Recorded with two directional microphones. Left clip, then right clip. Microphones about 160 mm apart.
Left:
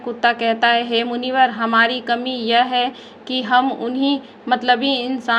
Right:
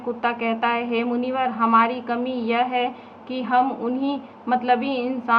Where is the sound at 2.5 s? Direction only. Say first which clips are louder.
Left 6 dB; 35° left (ahead or behind).